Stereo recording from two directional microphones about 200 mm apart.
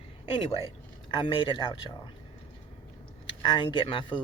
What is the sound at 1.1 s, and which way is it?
Speech, 25° left (ahead or behind).